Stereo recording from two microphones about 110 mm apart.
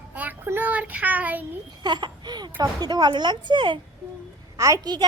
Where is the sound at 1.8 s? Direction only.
40° right (ahead or behind).